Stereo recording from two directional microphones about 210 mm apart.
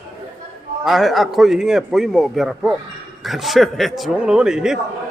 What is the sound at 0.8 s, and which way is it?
A man's voice, centre (ahead or behind).